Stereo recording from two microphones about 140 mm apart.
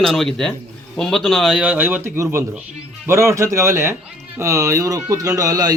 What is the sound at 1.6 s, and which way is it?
Speech, 10° right (ahead or behind).